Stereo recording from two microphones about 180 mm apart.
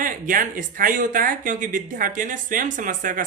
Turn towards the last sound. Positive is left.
turn(degrees=-50)  # may be behind; listen again after turning